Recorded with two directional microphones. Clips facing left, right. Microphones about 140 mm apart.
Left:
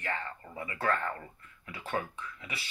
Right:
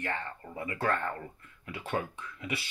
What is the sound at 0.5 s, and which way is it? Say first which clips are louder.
Speech: right 1 dB; 40° right (ahead or behind).